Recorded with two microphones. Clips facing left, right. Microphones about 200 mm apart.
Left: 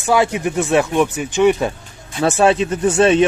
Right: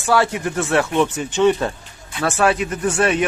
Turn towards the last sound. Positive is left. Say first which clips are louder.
# left 5 dB
turn(degrees=25)  # may be behind; listen again after turning